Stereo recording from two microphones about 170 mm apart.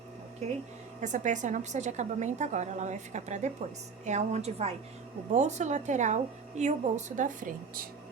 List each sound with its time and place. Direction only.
1.0 s a woman's voice: 45° right (ahead or behind)